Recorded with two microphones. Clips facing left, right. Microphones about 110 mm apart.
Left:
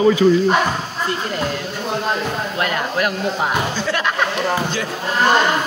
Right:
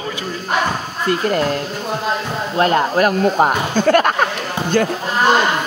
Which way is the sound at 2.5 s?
40° right (ahead or behind).